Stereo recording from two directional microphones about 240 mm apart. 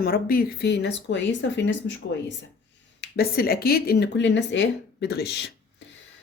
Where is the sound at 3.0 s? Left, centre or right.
Left.